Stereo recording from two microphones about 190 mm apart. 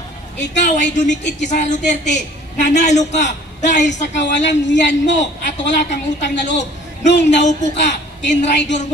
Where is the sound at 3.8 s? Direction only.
65° left (ahead or behind).